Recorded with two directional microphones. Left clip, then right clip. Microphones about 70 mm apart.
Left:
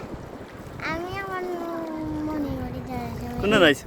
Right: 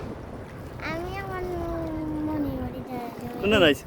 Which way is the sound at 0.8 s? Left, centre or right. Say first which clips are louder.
Left 3 dB; centre.